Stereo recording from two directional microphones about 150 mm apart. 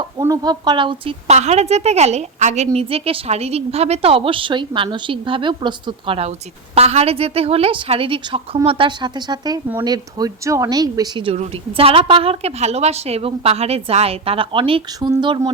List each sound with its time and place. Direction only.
0.2 s a woman's voice: 25° right (ahead or behind)
1.3 s a woman's voice: 50° right (ahead or behind); by 15.4 s 30° right (ahead or behind)